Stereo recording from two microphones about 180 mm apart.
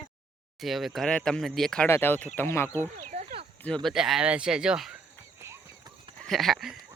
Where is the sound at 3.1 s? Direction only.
40° right (ahead or behind).